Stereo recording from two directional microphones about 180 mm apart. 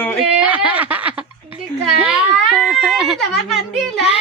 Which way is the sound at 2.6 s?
Centre (ahead or behind).